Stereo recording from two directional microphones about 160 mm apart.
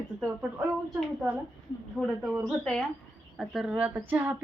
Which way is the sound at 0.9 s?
5° right (ahead or behind).